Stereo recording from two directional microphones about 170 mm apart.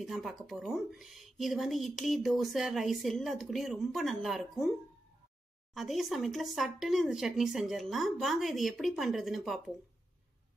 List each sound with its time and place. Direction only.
0.0 s speech: centre (ahead or behind)
5.8 s speech: centre (ahead or behind)